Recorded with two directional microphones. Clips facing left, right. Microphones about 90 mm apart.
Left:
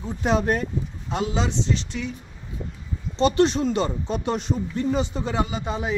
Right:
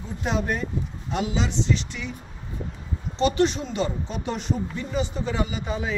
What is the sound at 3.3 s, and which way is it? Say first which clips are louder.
Speech: left 3 dB; 45° left (ahead or behind).